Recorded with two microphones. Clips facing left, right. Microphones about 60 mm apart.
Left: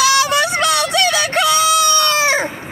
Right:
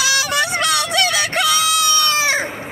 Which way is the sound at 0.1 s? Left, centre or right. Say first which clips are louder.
Left 4 dB; left.